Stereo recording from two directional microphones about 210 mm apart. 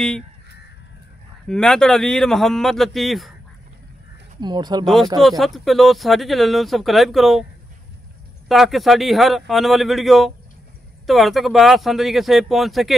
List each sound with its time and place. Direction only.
1.5 s speech: 5° left (ahead or behind)
4.4 s speech: 20° right (ahead or behind)
4.8 s speech: centre (ahead or behind)
8.5 s speech: centre (ahead or behind)